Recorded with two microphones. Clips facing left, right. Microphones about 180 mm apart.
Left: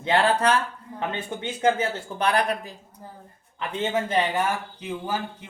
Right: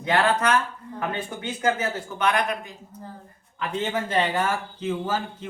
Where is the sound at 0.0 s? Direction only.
30° left (ahead or behind).